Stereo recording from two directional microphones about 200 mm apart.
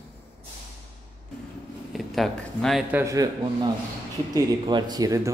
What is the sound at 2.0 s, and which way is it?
Speech, centre (ahead or behind).